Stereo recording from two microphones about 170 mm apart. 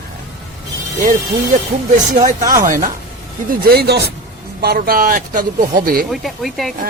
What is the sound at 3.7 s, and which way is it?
Speech, 70° right (ahead or behind).